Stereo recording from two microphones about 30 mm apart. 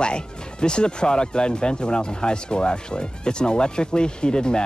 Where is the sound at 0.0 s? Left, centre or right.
Left.